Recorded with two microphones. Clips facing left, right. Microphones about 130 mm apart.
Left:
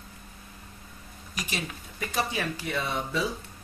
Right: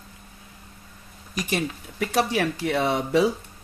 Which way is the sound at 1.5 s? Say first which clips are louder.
Right 10 dB; 70° right (ahead or behind).